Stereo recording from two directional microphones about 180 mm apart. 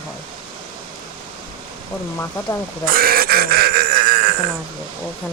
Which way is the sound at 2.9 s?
55° right (ahead or behind).